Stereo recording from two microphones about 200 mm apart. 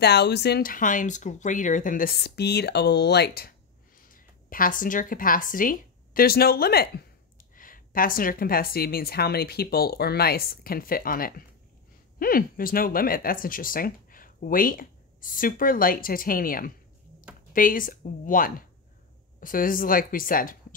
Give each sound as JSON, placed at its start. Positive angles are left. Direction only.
{"t": 0.0, "sound": "speech", "side_deg": 55}